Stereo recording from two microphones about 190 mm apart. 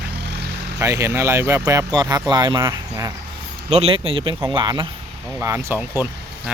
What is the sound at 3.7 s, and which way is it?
Speech, 30° right (ahead or behind).